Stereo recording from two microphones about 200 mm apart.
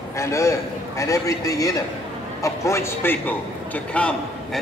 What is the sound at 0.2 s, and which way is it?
A man's voice, 15° left (ahead or behind).